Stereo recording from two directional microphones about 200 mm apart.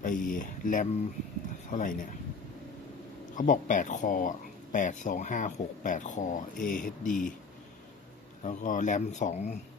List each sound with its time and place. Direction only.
0.0 s speech: 40° left (ahead or behind)
3.3 s speech: 40° left (ahead or behind)
8.4 s speech: 40° left (ahead or behind)